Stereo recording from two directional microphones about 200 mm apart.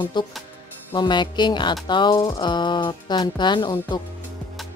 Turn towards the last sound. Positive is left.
turn(degrees=20)  # may be behind; listen again after turning